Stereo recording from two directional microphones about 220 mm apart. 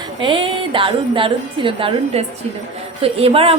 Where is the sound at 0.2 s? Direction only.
25° right (ahead or behind).